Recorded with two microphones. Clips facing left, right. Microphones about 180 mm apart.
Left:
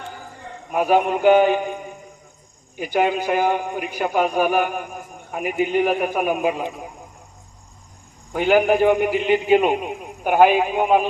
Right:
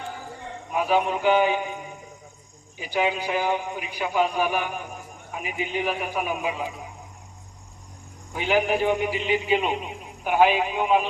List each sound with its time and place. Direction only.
0.7 s a man's voice: 50° left (ahead or behind)
8.3 s a man's voice: 50° left (ahead or behind)